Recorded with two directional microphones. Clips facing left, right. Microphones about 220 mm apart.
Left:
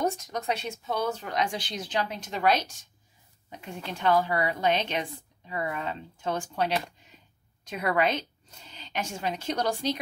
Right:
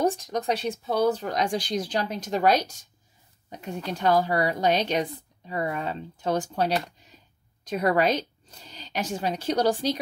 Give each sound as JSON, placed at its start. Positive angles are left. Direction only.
{"t": 0.0, "sound": "a woman's voice", "side_deg": -30}